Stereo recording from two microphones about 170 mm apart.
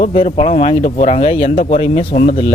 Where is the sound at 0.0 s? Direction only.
35° left (ahead or behind).